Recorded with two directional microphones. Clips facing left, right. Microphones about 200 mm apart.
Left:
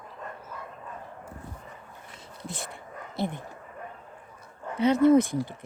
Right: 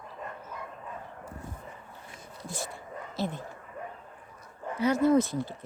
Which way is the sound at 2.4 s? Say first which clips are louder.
Even; 20° left (ahead or behind).